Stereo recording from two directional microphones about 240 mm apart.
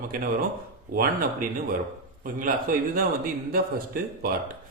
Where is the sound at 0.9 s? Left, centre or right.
Right.